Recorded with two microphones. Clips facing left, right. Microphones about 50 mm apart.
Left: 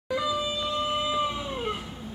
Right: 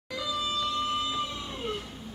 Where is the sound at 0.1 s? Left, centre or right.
Centre.